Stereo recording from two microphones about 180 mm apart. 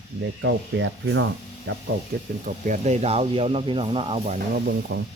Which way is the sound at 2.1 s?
55° right (ahead or behind).